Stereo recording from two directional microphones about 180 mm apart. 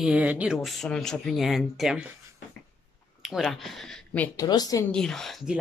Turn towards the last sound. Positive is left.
turn(degrees=0)  # may be behind; listen again after turning